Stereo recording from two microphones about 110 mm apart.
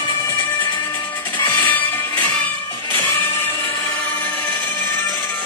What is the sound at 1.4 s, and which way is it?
Music, 15° left (ahead or behind).